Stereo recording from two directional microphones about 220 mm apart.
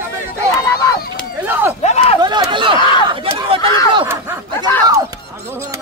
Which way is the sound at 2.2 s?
20° right (ahead or behind).